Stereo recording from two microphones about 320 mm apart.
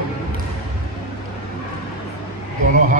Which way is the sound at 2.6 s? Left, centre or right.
Right.